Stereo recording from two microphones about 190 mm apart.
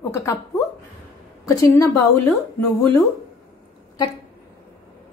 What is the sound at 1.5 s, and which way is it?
Speech, 15° left (ahead or behind).